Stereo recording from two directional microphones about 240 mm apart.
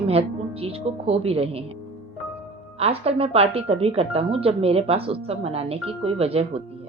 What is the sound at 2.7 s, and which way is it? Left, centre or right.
Speech, right.